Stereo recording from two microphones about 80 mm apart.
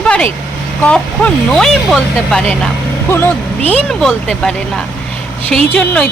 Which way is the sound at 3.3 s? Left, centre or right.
Centre.